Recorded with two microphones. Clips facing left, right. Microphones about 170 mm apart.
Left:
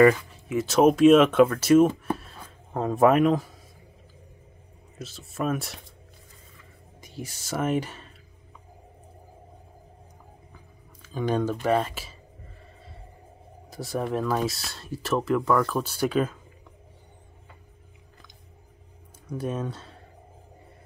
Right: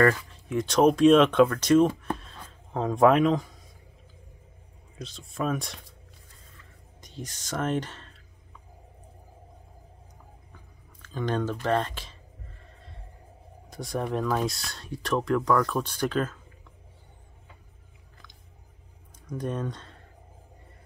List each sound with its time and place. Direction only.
0.2 s speech: 5° left (ahead or behind)
2.0 s a sound: 5° left (ahead or behind)
4.9 s speech: 5° left (ahead or behind)
7.0 s speech: 10° left (ahead or behind)
10.5 s a sound: 10° left (ahead or behind)
13.7 s speech: centre (ahead or behind)
19.2 s speech: 5° left (ahead or behind)